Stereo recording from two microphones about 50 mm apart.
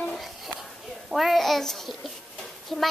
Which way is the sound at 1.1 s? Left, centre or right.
Centre.